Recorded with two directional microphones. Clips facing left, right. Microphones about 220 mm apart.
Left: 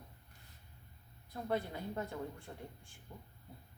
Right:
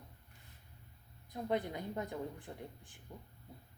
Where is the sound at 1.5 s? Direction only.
15° right (ahead or behind).